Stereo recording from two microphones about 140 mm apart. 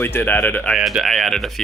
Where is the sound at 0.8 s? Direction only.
Centre (ahead or behind).